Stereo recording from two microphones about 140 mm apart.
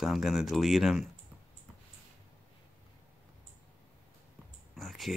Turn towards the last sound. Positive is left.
turn(degrees=0)  # may be behind; listen again after turning